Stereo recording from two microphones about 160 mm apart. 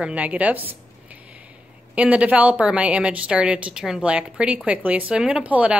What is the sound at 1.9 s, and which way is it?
A woman's voice, 10° right (ahead or behind).